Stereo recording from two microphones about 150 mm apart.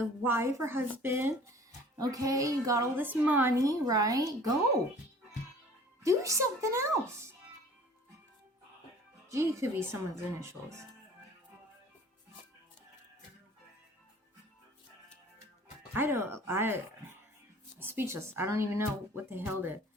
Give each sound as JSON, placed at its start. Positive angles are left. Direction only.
{"t": 0.2, "sound": "a woman's voice", "side_deg": -15}
{"t": 3.6, "sound": "a woman's voice", "side_deg": -25}
{"t": 6.0, "sound": "a woman's voice", "side_deg": -20}
{"t": 9.3, "sound": "a woman's voice", "side_deg": -20}
{"t": 15.9, "sound": "speech", "side_deg": -15}